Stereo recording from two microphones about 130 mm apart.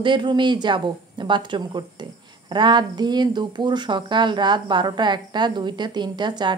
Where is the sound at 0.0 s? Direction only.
40° right (ahead or behind).